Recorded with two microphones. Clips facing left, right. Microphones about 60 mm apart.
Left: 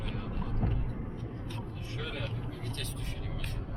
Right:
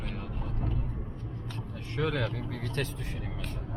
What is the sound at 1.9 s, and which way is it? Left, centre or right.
Speech, right.